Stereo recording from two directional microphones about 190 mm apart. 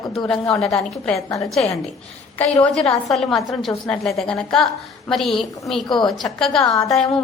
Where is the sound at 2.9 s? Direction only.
Centre (ahead or behind).